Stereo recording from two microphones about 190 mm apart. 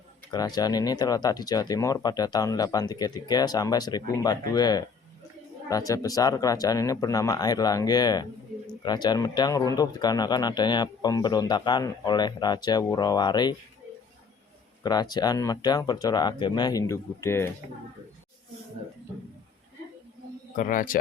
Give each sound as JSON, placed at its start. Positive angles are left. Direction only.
{"t": 0.3, "sound": "speech", "side_deg": 20}
{"t": 14.8, "sound": "speech", "side_deg": 20}
{"t": 20.6, "sound": "a man's voice", "side_deg": 45}